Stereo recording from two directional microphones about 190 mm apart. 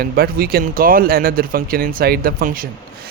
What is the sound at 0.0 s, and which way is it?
Speech, 55° right (ahead or behind).